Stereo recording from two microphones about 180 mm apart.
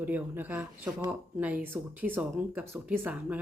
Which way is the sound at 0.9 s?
20° right (ahead or behind).